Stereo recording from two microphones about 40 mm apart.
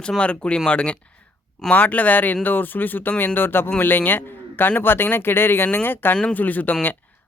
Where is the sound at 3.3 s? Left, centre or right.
Left.